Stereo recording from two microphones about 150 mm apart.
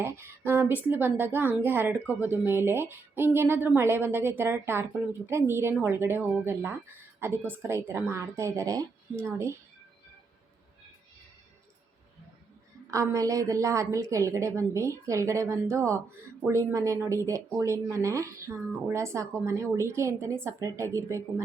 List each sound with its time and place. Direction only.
0.0 s a woman's voice: 15° right (ahead or behind)
12.9 s speech: 20° right (ahead or behind)